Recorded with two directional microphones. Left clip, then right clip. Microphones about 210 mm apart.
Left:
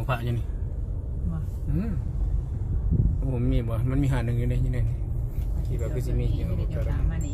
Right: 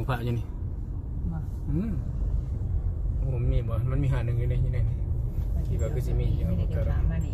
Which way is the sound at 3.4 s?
25° left (ahead or behind).